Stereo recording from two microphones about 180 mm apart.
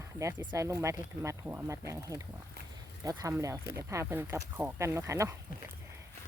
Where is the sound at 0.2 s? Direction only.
15° right (ahead or behind).